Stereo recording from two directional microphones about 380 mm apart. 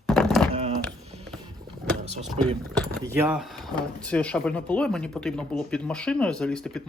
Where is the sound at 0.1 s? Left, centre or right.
Centre.